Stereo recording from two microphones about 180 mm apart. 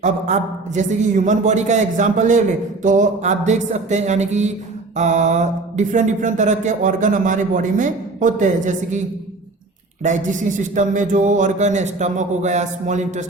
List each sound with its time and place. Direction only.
0.0 s a man's voice: 40° right (ahead or behind)
4.9 s mantra: 40° right (ahead or behind)
10.0 s mantra: 45° right (ahead or behind)